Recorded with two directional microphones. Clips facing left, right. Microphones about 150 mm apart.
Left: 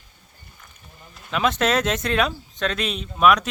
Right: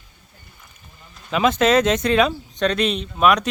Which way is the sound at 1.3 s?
Centre (ahead or behind).